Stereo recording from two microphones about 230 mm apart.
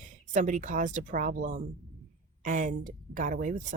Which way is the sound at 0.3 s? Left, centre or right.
Right.